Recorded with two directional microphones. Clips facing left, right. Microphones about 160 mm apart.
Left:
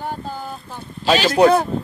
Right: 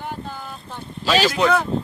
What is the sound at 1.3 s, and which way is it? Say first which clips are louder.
Speech: left 6 dB; 40° left (ahead or behind).